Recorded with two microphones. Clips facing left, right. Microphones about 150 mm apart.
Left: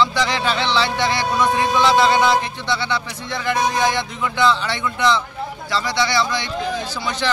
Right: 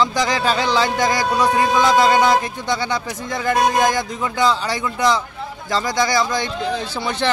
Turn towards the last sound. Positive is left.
turn(degrees=-45)  # may be behind; listen again after turning